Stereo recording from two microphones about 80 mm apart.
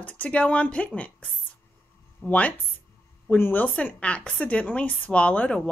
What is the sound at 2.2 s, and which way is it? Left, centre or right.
Speech, centre.